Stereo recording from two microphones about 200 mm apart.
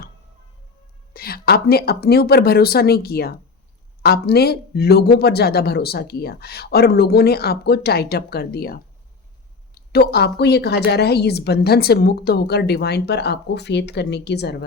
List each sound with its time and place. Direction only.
1.1 s speech: 50° left (ahead or behind)